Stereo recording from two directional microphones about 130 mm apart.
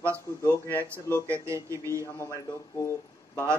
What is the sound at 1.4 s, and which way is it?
Speech, 20° right (ahead or behind).